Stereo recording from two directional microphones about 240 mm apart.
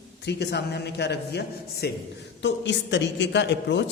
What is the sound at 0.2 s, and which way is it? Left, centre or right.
Speech, left.